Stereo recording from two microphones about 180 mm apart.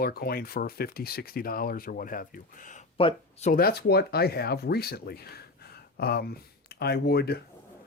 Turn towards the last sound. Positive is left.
turn(degrees=65)  # may be behind; listen again after turning